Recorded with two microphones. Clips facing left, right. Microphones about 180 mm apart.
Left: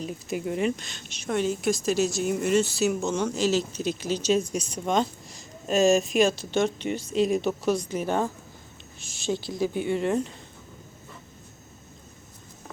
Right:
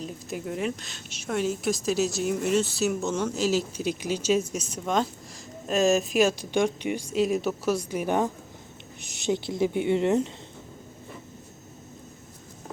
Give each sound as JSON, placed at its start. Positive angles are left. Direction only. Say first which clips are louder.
{"t": 0.0, "sound": "speech", "louder": "left 3 dB", "side_deg": 0}